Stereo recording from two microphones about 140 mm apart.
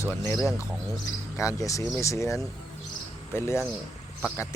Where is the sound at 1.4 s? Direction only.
20° left (ahead or behind).